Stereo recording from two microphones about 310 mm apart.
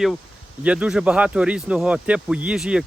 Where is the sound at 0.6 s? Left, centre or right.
Centre.